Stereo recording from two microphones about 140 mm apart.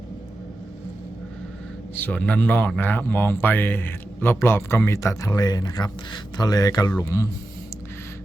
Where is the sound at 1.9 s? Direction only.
10° left (ahead or behind).